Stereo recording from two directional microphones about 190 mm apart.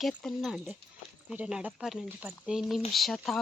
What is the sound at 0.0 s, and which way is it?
Speech, 5° left (ahead or behind).